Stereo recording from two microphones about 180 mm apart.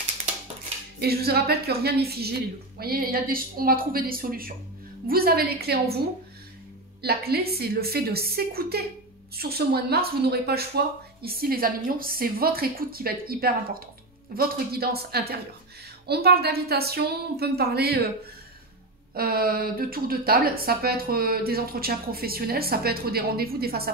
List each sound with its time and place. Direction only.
1.0 s a woman's voice: 60° right (ahead or behind)
7.0 s speech: 60° right (ahead or behind)
19.1 s speech: 55° right (ahead or behind)